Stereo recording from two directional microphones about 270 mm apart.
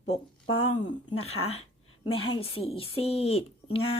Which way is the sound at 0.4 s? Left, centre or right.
Left.